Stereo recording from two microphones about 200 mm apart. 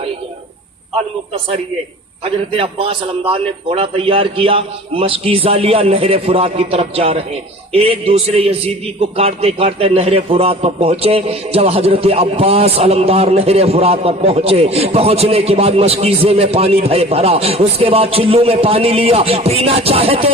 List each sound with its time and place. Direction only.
2.2 s a man's voice: 25° right (ahead or behind)